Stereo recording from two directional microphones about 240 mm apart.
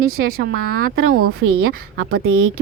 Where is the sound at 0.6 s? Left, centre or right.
Right.